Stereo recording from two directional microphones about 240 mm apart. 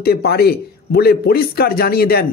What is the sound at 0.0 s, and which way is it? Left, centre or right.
Speech, left.